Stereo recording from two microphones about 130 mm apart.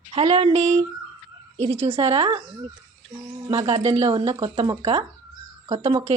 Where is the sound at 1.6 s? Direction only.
50° right (ahead or behind).